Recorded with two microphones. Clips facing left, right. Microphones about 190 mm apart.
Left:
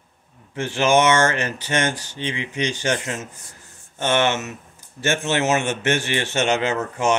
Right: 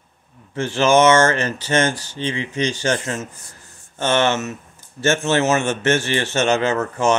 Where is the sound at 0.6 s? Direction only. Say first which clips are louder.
Right 3 dB; 15° left (ahead or behind).